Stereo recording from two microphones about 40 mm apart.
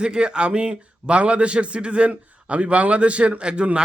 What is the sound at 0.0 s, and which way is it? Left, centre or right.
A man's voice, right.